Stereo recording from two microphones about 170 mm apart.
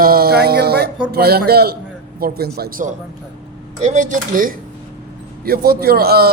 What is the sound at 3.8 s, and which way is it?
Speech, 45° right (ahead or behind).